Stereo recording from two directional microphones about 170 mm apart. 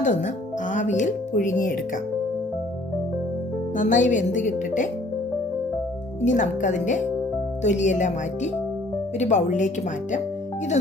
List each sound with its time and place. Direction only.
0.0 s speech: 45° left (ahead or behind)
3.8 s speech: 50° left (ahead or behind)
6.2 s speech: 45° left (ahead or behind)